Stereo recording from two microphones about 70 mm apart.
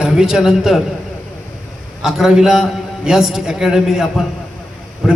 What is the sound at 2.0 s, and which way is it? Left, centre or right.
A man's voice, centre.